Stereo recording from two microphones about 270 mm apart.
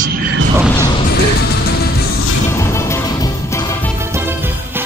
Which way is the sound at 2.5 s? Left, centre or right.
Centre.